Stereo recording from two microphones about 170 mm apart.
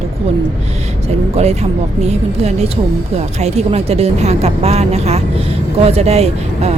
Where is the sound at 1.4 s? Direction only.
40° right (ahead or behind).